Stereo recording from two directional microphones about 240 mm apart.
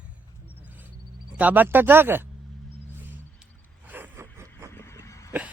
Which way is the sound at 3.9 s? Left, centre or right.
Centre.